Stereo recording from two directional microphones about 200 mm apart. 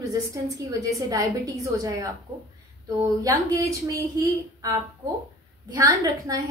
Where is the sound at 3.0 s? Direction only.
15° right (ahead or behind).